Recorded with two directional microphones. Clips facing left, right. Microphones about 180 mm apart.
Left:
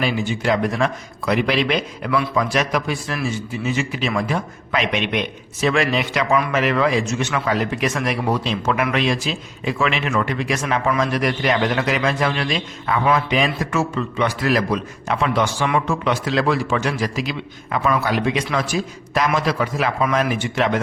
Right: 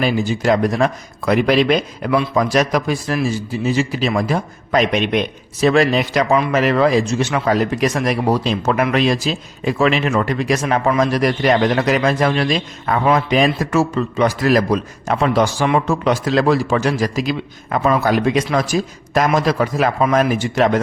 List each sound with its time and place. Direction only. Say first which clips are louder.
0.0 s speech: right 4 dB; 40° right (ahead or behind)